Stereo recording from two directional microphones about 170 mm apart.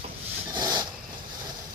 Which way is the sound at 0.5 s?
25° right (ahead or behind).